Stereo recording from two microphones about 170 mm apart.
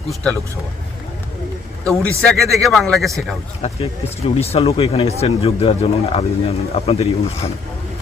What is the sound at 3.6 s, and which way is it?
Speech, 35° left (ahead or behind).